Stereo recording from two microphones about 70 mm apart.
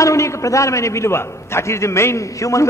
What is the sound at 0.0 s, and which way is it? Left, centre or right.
A man's voice, left.